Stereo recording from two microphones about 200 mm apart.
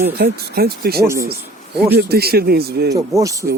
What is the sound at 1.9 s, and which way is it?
Speech, 50° right (ahead or behind).